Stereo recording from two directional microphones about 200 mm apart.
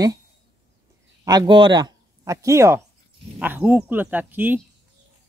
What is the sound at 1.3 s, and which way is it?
Speech, 20° right (ahead or behind).